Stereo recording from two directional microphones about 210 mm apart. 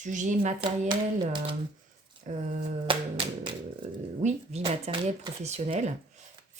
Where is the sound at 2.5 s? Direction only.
35° right (ahead or behind).